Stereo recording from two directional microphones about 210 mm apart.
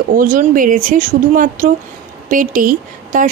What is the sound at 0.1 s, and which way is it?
Speech, 40° right (ahead or behind).